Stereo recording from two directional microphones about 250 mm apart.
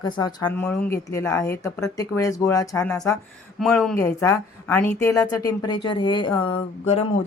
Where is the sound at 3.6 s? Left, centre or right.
Centre; by 7.3 s left.